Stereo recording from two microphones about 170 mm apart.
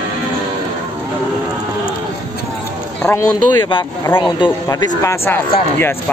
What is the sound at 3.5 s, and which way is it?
Speech, 30° left (ahead or behind).